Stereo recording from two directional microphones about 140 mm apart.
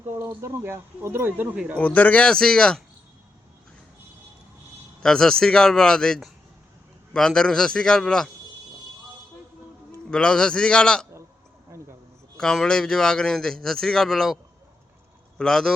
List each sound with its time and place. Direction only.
0.1 s speech: 20° right (ahead or behind)
1.8 s speech: 10° left (ahead or behind)
5.0 s a man's voice: 5° left (ahead or behind)
10.1 s speech: 5° left (ahead or behind)
11.7 s a sound: 20° right (ahead or behind)
12.4 s a man's voice: 5° left (ahead or behind)
15.4 s a man's voice: 5° left (ahead or behind)